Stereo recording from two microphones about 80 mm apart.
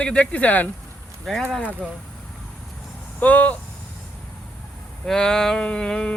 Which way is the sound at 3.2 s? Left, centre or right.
Centre.